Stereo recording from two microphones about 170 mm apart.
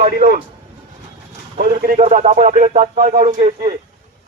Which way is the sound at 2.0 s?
40° right (ahead or behind).